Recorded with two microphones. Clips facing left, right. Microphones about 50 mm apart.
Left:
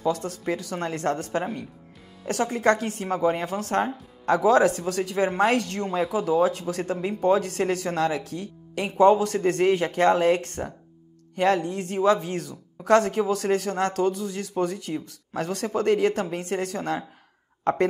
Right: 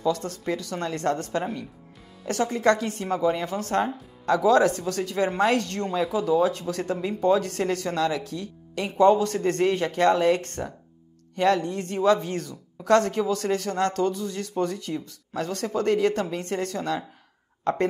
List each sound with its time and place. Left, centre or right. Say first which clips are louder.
0.2 s speech: left 1 dB; centre